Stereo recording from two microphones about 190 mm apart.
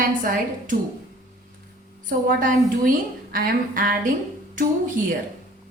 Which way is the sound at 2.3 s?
45° right (ahead or behind).